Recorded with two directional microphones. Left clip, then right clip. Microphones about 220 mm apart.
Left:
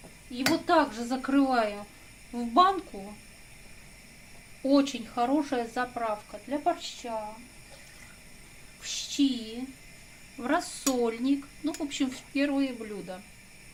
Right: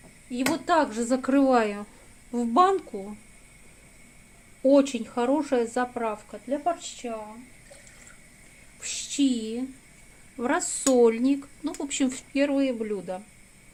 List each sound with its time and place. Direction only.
0.3 s speech: 45° right (ahead or behind)
4.7 s speech: 40° right (ahead or behind)
8.8 s speech: 45° right (ahead or behind)